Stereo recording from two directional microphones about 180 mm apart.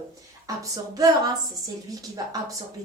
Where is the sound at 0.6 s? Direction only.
20° right (ahead or behind).